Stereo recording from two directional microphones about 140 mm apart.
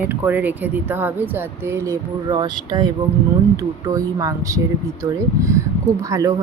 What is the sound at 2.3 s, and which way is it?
Speech, 30° right (ahead or behind).